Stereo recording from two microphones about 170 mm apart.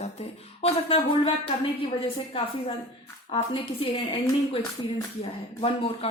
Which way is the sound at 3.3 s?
35° left (ahead or behind).